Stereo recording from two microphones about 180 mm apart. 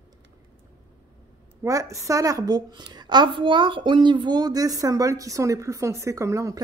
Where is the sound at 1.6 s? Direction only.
20° right (ahead or behind).